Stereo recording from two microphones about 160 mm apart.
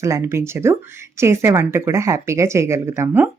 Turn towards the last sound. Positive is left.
turn(degrees=-15)  # may be behind; listen again after turning